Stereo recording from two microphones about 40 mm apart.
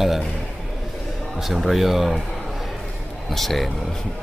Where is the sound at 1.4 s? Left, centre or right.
Centre.